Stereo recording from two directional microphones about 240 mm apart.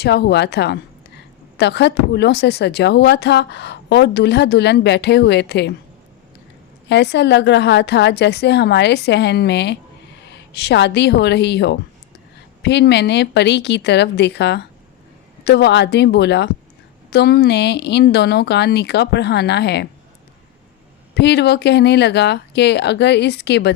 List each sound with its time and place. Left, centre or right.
0.0 s speech: left
6.8 s a woman's voice: left
21.2 s speech: left